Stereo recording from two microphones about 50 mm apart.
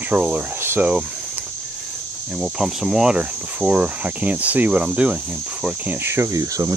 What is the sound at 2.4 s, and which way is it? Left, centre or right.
Speech, centre.